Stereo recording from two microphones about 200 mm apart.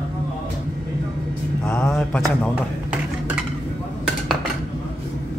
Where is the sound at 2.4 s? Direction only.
5° right (ahead or behind).